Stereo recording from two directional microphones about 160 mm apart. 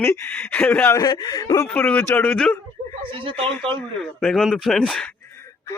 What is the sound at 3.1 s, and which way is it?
Speech, 35° right (ahead or behind).